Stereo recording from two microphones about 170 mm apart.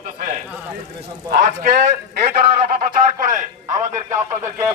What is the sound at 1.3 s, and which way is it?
Speech, 55° right (ahead or behind).